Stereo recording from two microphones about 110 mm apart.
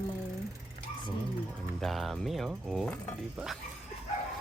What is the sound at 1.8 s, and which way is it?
Speech, centre (ahead or behind).